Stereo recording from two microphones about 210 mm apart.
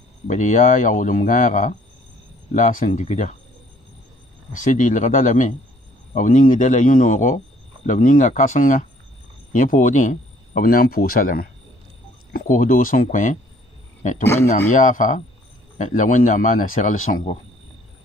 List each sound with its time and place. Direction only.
0.3 s a man's voice: 35° left (ahead or behind)
4.5 s a man's voice: 40° left (ahead or behind)
14.2 s speech: 10° left (ahead or behind)
14.8 s a man's voice: 40° left (ahead or behind)